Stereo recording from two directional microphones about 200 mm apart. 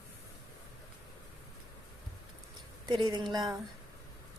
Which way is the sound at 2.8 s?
20° right (ahead or behind).